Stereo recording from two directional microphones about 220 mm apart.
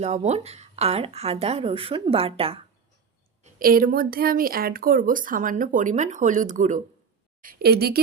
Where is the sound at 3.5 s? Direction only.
40° right (ahead or behind).